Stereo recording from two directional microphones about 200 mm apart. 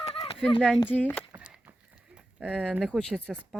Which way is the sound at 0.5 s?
Centre (ahead or behind).